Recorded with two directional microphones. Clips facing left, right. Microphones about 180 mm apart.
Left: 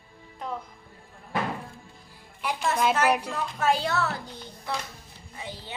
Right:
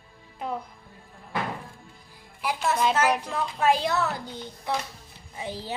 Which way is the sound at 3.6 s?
15° right (ahead or behind).